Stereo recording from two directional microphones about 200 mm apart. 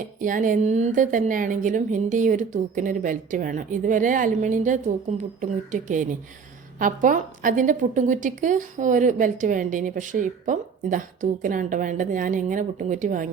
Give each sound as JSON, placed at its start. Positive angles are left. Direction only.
{"t": 0.0, "sound": "a woman's voice", "side_deg": -40}